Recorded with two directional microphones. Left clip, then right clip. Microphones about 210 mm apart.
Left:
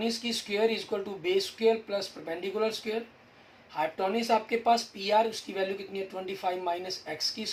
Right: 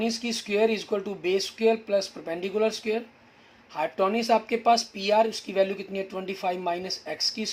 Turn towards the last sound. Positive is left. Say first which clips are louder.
# right 4 dB
turn(degrees=-50)  # may be behind; listen again after turning